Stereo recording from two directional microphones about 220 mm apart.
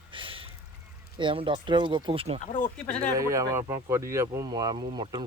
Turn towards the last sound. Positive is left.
turn(degrees=-20)  # may be behind; listen again after turning